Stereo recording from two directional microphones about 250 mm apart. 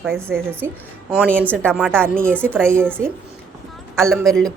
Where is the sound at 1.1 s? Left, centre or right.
Centre.